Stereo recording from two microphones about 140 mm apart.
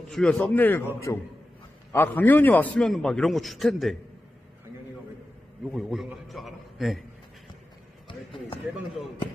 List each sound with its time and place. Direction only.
0.1 s a man's voice: 5° left (ahead or behind)
5.7 s a man's voice: centre (ahead or behind)